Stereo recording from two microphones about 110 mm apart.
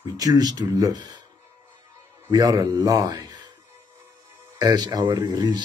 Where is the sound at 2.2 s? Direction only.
35° right (ahead or behind).